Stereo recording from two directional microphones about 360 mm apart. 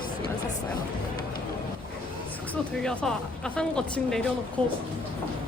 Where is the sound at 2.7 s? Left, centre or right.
Centre.